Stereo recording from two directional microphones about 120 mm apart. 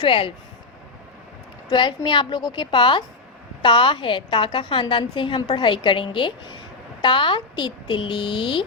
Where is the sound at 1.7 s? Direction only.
40° left (ahead or behind).